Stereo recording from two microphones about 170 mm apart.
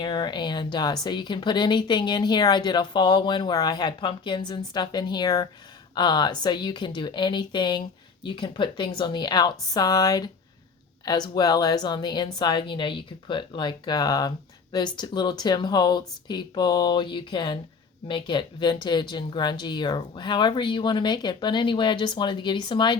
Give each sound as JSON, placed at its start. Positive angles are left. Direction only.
{"t": 0.0, "sound": "speech", "side_deg": 25}